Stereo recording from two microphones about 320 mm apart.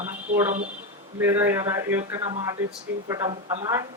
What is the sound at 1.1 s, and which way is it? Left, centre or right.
Speech, centre.